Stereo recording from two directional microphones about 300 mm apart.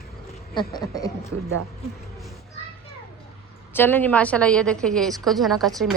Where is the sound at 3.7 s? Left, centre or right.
Centre.